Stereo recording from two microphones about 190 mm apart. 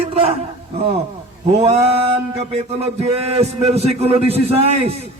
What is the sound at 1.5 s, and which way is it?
A man's voice, 35° right (ahead or behind).